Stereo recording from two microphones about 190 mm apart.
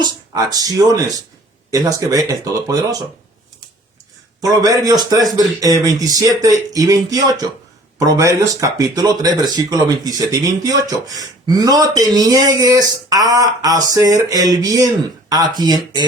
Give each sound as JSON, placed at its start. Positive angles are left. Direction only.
{"t": 0.0, "sound": "speech", "side_deg": -20}
{"t": 4.4, "sound": "speech", "side_deg": -20}